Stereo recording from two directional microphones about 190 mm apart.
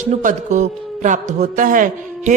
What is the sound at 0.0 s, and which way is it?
A man's voice, 40° right (ahead or behind).